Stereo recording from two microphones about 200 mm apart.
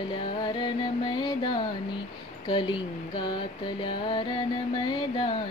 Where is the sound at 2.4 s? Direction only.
25° left (ahead or behind).